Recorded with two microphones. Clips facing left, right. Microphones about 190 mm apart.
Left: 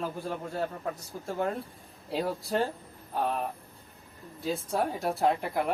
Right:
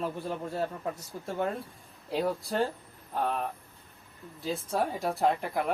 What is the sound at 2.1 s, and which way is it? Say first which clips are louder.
Speech: even; centre (ahead or behind).